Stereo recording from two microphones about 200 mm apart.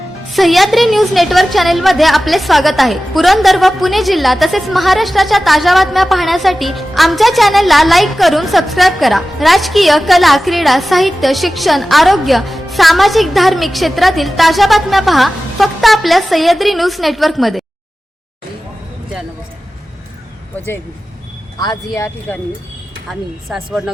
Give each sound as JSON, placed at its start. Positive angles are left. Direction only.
{"t": 0.3, "sound": "a woman's voice", "side_deg": 0}
{"t": 21.6, "sound": "speech", "side_deg": 15}
{"t": 23.0, "sound": "a woman's voice", "side_deg": 0}